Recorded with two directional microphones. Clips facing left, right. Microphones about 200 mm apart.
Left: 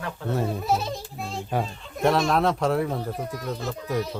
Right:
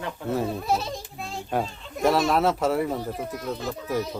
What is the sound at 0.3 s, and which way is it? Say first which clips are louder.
A child's voice: even; centre (ahead or behind).